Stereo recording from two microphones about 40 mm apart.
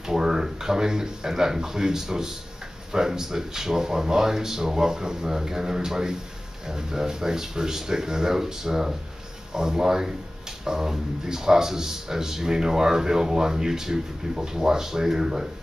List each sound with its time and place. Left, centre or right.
0.0 s speech: centre